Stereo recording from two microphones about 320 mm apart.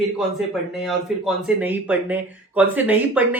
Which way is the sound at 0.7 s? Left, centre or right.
Centre.